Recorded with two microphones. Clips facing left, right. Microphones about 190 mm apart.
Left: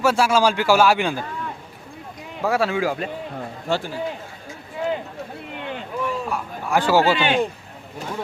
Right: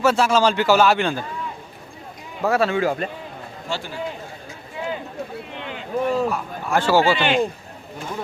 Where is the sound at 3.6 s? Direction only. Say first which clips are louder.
Left 5 dB; 55° left (ahead or behind).